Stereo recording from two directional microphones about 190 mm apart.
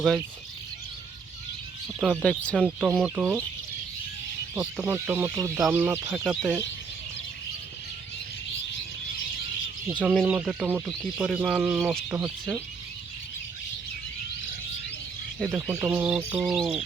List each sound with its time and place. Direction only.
2.0 s speech: centre (ahead or behind)
4.8 s speech: 10° right (ahead or behind)
6.2 s speech: centre (ahead or behind)
9.8 s speech: 10° right (ahead or behind)
12.1 s speech: 15° right (ahead or behind)
15.5 s speech: 10° right (ahead or behind)